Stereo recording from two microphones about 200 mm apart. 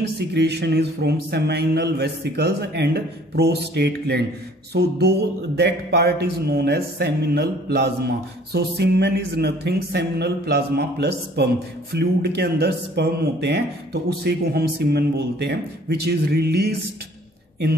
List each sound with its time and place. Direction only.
0.3 s a man's voice: 55° right (ahead or behind)